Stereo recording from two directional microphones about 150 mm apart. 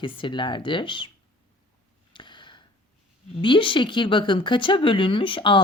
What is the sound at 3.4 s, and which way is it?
Speech, 35° left (ahead or behind).